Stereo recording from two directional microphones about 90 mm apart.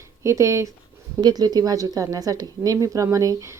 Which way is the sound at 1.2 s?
50° right (ahead or behind).